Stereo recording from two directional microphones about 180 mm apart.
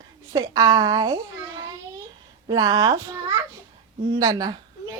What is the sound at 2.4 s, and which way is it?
A child's voice, 20° right (ahead or behind).